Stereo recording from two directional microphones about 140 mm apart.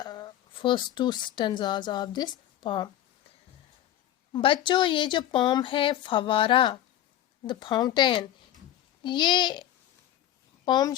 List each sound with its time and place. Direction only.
0.0 s speech: 30° left (ahead or behind)
4.3 s a woman's voice: 35° left (ahead or behind)
10.7 s speech: 30° left (ahead or behind)